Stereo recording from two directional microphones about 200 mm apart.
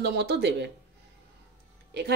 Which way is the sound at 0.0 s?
55° right (ahead or behind).